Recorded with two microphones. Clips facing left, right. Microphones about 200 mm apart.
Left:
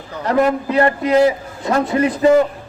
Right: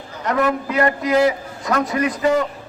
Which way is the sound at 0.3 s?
30° left (ahead or behind).